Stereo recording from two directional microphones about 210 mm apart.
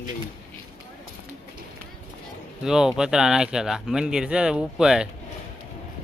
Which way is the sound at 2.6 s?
Centre (ahead or behind).